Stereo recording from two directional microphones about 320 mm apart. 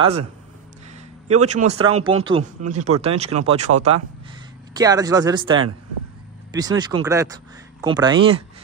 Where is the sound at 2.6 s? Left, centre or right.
Right.